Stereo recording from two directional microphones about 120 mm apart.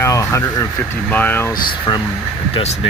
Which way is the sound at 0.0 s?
25° left (ahead or behind).